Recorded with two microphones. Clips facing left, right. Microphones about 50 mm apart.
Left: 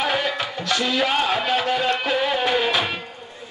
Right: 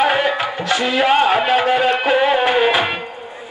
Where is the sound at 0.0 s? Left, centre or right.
Right.